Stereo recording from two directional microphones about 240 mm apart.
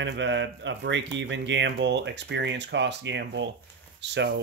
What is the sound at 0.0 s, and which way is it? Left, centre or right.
Speech, right.